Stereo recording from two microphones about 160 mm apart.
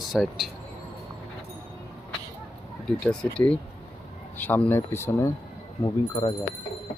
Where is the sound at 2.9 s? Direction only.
5° left (ahead or behind).